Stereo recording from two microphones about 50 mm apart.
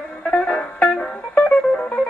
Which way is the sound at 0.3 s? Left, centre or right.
Centre.